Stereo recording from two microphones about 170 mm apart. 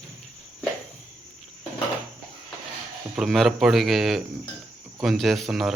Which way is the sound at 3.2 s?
Centre (ahead or behind).